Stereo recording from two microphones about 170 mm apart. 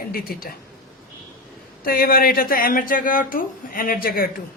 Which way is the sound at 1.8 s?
60° left (ahead or behind).